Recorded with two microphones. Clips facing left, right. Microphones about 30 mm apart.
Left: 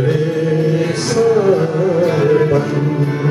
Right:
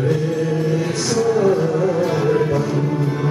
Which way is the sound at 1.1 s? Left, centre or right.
Left.